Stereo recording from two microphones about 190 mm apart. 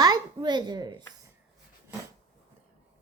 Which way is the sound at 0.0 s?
20° right (ahead or behind).